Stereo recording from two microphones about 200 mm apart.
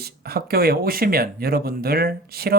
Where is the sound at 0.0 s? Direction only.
50° right (ahead or behind).